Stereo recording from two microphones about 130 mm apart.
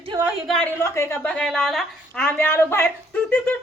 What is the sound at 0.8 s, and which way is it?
Speech, 20° left (ahead or behind).